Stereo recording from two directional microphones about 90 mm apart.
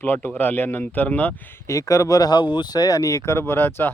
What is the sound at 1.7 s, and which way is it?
Speech, 35° left (ahead or behind).